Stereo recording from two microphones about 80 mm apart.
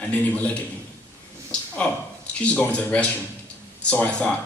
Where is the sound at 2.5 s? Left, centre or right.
Centre.